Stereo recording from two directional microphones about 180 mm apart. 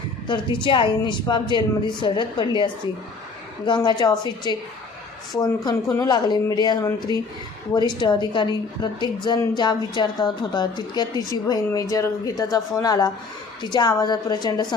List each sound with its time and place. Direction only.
0.3 s a woman's voice: 25° left (ahead or behind)
3.7 s a woman's voice: 25° left (ahead or behind)